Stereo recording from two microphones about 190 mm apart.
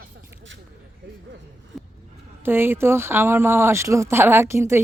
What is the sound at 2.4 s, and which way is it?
Speech, 10° right (ahead or behind).